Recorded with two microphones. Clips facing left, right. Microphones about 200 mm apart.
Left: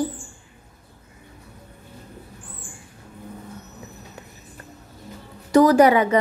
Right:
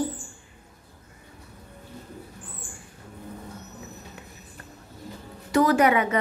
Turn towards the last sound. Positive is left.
turn(degrees=35)  # may be behind; listen again after turning